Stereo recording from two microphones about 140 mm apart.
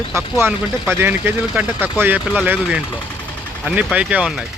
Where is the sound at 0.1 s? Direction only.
20° right (ahead or behind).